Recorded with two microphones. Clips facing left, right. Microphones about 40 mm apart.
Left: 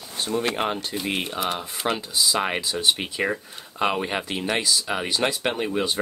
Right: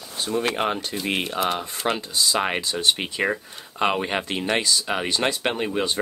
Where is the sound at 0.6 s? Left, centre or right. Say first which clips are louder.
Right 1 dB; centre.